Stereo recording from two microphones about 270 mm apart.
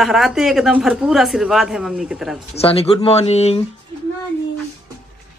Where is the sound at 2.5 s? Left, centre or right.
Left.